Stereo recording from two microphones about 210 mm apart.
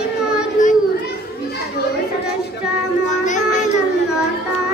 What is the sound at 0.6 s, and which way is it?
Children playing, 35° left (ahead or behind).